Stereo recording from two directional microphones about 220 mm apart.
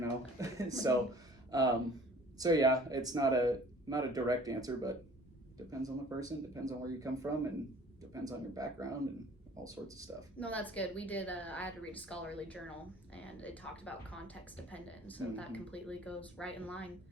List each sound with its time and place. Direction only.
0.0 s a sound: 15° right (ahead or behind)
2.4 s speech: 15° right (ahead or behind)
10.4 s a woman's voice: 5° left (ahead or behind)